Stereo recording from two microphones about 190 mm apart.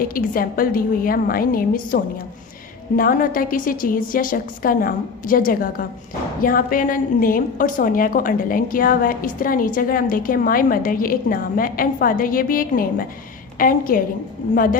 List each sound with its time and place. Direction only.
0.0 s a woman's voice: 50° left (ahead or behind)